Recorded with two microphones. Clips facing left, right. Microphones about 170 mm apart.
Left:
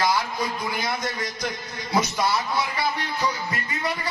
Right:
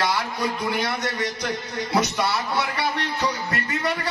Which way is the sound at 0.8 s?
70° right (ahead or behind).